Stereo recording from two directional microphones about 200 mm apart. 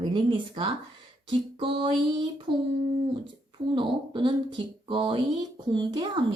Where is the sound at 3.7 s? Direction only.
25° right (ahead or behind).